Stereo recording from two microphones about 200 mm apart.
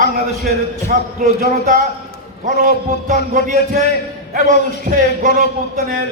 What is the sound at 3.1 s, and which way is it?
A man's voice, 40° right (ahead or behind).